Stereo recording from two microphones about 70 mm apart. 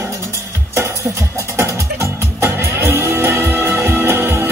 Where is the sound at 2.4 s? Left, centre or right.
Right.